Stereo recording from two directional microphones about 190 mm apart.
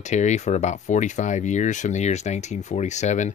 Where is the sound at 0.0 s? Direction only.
40° left (ahead or behind).